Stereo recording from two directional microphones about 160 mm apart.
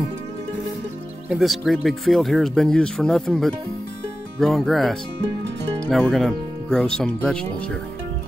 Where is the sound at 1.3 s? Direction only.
Centre (ahead or behind).